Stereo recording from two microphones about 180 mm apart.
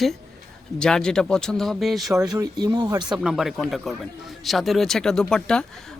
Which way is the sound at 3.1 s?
Centre (ahead or behind).